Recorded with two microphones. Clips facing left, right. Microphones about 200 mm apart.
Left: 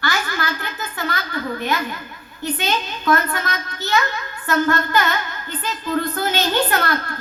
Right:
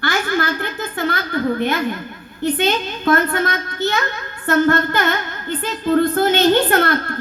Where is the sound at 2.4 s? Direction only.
55° right (ahead or behind).